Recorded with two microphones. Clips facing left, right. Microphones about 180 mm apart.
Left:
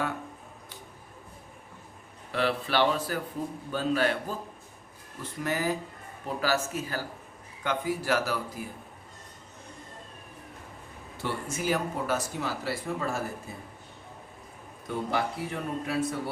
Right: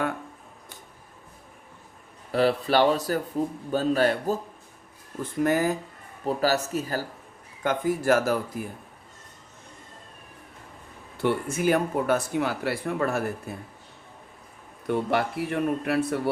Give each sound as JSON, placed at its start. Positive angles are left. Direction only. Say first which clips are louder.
{"t": 2.3, "sound": "speech", "louder": "right 6 dB", "side_deg": -40}
{"t": 6.2, "sound": "speech", "louder": "right 5 dB", "side_deg": -40}
{"t": 11.2, "sound": "speech", "louder": "right 8 dB", "side_deg": -60}
{"t": 14.8, "sound": "speech", "louder": "right 5 dB", "side_deg": -65}